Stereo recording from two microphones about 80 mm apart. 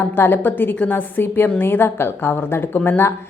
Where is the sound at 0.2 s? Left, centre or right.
Left.